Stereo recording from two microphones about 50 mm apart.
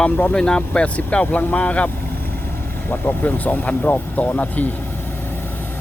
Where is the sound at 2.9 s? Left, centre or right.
Left.